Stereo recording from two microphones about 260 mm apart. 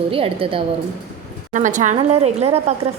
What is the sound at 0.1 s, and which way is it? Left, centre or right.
A woman's voice, right.